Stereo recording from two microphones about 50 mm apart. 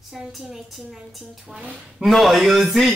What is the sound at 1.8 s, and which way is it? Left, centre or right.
Speech, centre.